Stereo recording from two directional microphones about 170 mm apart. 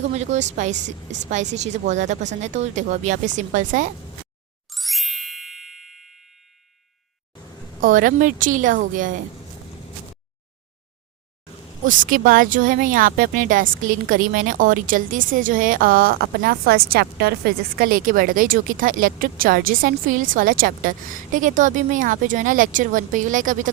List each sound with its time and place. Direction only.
0.1 s speech: 40° right (ahead or behind)
4.7 s ding: centre (ahead or behind)
7.8 s speech: 50° right (ahead or behind)
11.9 s speech: 50° right (ahead or behind)